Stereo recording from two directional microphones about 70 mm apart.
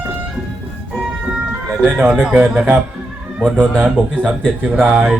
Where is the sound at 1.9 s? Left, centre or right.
Centre.